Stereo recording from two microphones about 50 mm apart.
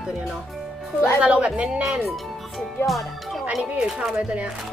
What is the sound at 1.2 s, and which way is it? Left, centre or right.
Speech, right.